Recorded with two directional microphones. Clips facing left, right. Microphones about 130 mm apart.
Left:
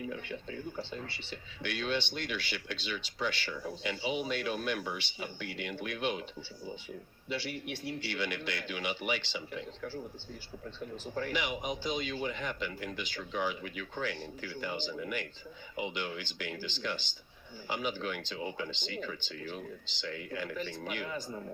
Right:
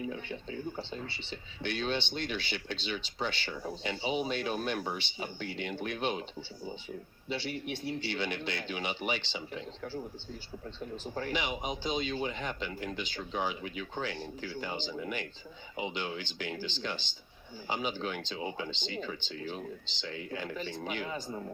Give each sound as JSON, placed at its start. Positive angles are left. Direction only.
{"t": 0.1, "sound": "speech", "side_deg": -25}
{"t": 8.0, "sound": "speech", "side_deg": -25}
{"t": 11.1, "sound": "speech", "side_deg": -30}